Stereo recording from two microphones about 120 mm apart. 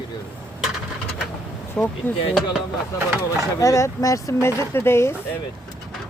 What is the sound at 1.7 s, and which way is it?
Speech, 15° left (ahead or behind).